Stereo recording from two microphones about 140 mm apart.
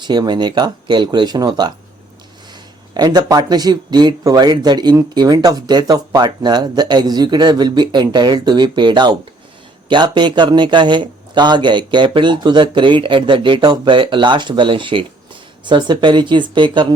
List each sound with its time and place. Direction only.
0.0 s speech: 30° right (ahead or behind)